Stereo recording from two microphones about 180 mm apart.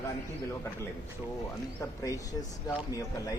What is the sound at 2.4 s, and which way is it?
Speech, 20° left (ahead or behind).